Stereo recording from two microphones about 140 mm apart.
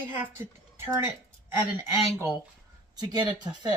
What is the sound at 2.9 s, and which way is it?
Speech, 30° right (ahead or behind).